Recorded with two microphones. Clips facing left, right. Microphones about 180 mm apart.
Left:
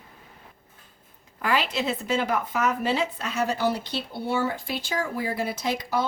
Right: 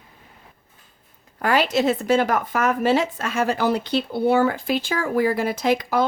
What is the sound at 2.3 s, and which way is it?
Speech, 50° right (ahead or behind).